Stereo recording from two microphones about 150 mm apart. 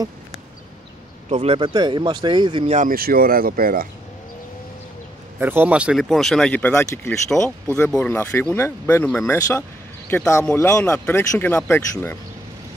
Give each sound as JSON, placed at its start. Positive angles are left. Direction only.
{"t": 1.3, "sound": "speech", "side_deg": -40}
{"t": 2.7, "sound": "speech", "side_deg": -65}
{"t": 5.4, "sound": "speech", "side_deg": -10}